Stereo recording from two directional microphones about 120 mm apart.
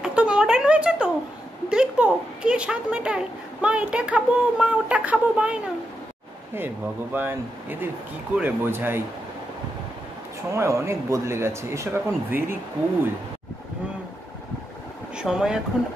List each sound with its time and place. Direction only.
0.0 s a sound: 10° right (ahead or behind)
1.7 s speech: 5° right (ahead or behind)
10.5 s speech: 25° right (ahead or behind)
15.1 s speech: 5° right (ahead or behind)